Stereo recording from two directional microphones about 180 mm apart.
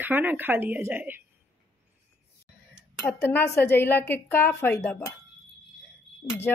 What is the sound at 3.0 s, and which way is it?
Speech, 10° left (ahead or behind).